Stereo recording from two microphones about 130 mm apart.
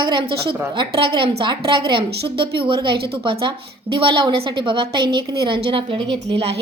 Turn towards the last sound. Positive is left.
turn(degrees=-50)  # may be behind; listen again after turning